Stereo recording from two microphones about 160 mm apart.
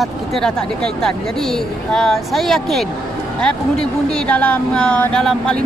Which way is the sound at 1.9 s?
5° left (ahead or behind).